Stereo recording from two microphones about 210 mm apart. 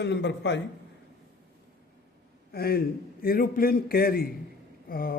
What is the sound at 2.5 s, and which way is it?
A man's voice, 50° left (ahead or behind).